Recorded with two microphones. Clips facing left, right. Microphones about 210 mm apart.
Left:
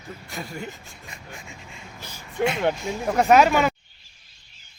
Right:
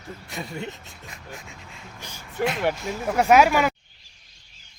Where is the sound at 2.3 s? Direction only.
Centre (ahead or behind).